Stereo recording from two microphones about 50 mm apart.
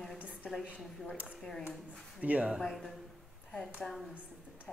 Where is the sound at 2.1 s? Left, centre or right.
Right.